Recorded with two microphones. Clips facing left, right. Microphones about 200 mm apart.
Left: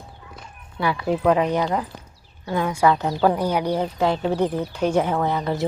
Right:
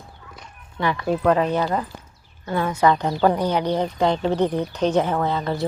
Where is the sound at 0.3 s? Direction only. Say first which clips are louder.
Even; 10° left (ahead or behind).